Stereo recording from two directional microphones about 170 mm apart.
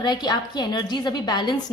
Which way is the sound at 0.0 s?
25° left (ahead or behind).